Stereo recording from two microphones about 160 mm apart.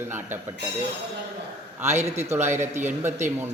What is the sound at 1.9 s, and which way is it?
Speech, 45° right (ahead or behind).